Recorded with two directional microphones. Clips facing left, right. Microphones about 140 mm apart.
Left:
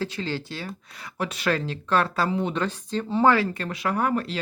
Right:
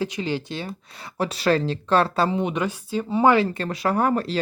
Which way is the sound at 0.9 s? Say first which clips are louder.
Right 4 dB; 30° right (ahead or behind).